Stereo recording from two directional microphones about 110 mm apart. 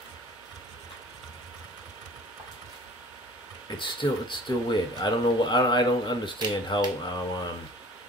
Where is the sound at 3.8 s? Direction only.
45° left (ahead or behind).